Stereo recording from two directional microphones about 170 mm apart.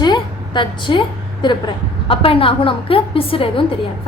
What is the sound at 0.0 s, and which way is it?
A woman's voice, 25° left (ahead or behind).